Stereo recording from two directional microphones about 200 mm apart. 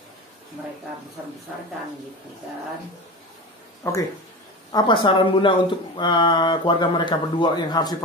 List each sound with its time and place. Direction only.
3.8 s speech: 15° left (ahead or behind)